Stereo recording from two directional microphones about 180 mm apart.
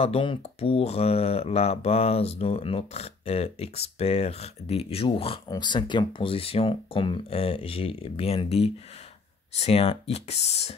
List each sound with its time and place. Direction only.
0.0 s speech: 30° left (ahead or behind)